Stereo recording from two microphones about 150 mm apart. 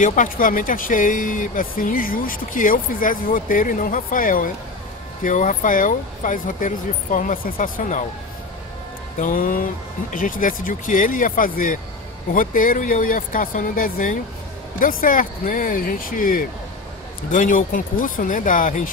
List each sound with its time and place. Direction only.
0.0 s speech: 60° left (ahead or behind)
9.2 s speech: 70° left (ahead or behind)